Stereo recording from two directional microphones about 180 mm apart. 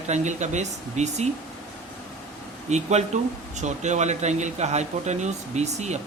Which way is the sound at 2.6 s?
40° right (ahead or behind).